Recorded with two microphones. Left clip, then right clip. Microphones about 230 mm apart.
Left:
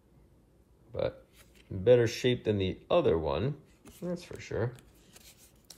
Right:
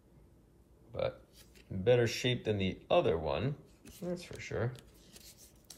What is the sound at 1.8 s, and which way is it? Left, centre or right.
Speech, left.